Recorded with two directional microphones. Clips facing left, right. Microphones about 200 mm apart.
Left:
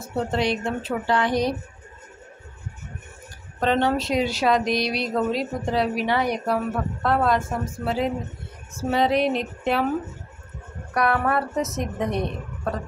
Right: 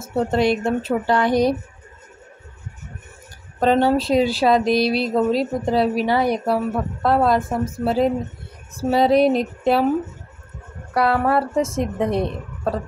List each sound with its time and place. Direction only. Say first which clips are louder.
0.1 s speech: right 5 dB; 45° right (ahead or behind)
3.5 s speech: right 5 dB; 35° right (ahead or behind)
11.0 s a woman's voice: right 4 dB; 30° right (ahead or behind)